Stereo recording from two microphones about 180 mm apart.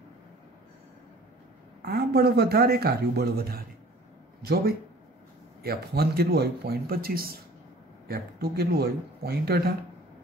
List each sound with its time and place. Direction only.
1.8 s speech: 60° right (ahead or behind)